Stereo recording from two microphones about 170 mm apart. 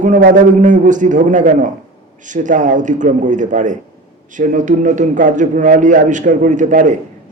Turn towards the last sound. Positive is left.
turn(degrees=-50)  # may be behind; listen again after turning